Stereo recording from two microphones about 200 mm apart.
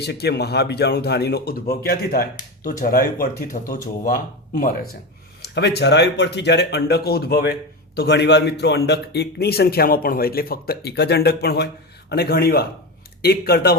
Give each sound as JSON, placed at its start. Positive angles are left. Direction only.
{"t": 0.0, "sound": "speech", "side_deg": 55}
{"t": 5.4, "sound": "speech", "side_deg": 55}